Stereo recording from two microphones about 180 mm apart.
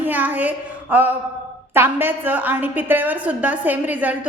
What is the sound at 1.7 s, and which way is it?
A woman's voice, 10° right (ahead or behind).